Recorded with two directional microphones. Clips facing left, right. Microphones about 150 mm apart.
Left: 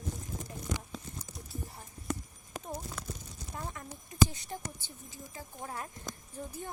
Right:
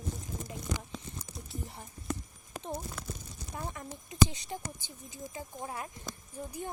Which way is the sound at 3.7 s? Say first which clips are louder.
Right 1 dB; 20° right (ahead or behind).